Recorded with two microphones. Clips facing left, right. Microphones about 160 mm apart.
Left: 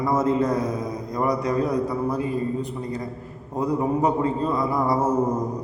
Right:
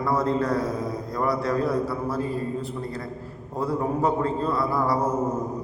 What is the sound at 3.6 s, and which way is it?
A man's voice, 15° left (ahead or behind).